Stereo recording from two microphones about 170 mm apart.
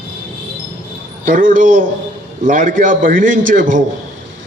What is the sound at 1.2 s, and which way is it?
A man's voice, 50° right (ahead or behind).